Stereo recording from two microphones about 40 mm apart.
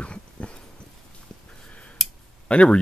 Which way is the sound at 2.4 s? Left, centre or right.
Left.